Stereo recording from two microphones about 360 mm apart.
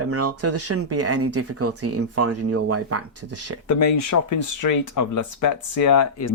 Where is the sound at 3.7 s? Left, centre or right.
Left.